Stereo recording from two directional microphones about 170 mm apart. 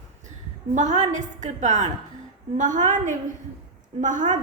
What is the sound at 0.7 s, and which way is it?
A woman's voice, 45° right (ahead or behind).